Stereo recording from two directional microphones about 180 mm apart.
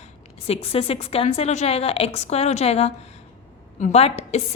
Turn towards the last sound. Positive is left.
turn(degrees=35)  # may be behind; listen again after turning